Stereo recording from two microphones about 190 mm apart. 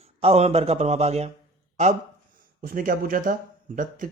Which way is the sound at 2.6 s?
45° right (ahead or behind).